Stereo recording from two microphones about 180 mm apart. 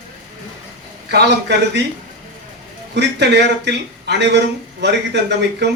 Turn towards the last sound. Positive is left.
turn(degrees=-75)  # may be behind; listen again after turning